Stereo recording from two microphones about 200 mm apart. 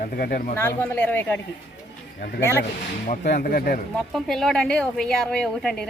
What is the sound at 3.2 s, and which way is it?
Speech, 50° left (ahead or behind).